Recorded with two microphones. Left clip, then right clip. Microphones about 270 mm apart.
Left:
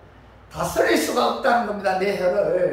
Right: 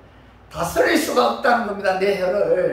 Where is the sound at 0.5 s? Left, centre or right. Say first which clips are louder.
Right 2 dB; centre.